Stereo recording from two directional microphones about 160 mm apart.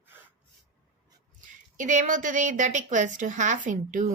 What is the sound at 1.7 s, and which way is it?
A woman's voice, 55° right (ahead or behind).